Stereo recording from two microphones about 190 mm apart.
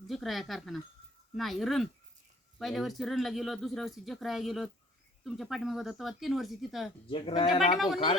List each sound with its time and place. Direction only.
0.1 s speech: centre (ahead or behind)
7.1 s speech: 30° left (ahead or behind)